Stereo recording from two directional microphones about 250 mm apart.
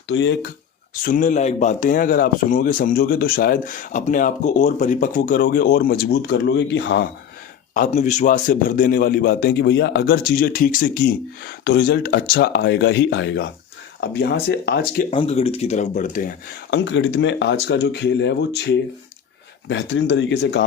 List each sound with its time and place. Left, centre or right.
0.1 s speech: left
1.0 s speech: left
7.7 s speech: left
15.1 s speech: left
16.7 s speech: left